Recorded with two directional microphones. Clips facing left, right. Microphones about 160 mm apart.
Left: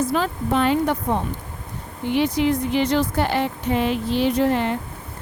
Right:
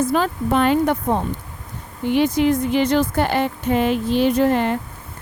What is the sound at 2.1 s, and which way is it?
A woman's voice, 50° right (ahead or behind).